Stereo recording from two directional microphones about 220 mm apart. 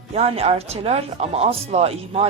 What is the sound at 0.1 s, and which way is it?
Speech, 30° right (ahead or behind).